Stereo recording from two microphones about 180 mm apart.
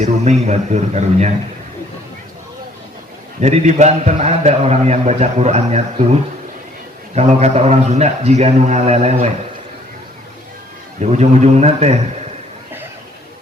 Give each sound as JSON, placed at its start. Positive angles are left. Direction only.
{"t": 0.0, "sound": "a man's voice", "side_deg": -40}
{"t": 3.4, "sound": "a man's voice", "side_deg": -40}
{"t": 7.2, "sound": "a man's voice", "side_deg": -35}
{"t": 11.0, "sound": "a man's voice", "side_deg": -40}